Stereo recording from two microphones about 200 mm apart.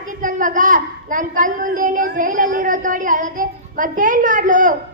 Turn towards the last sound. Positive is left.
turn(degrees=-40)  # may be behind; listen again after turning